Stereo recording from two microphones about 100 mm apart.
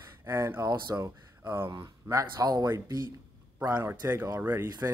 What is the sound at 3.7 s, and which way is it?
Speech, 20° right (ahead or behind).